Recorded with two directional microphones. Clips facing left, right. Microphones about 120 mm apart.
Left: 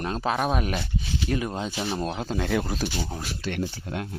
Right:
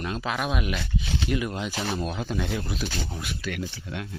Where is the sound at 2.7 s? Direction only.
40° left (ahead or behind).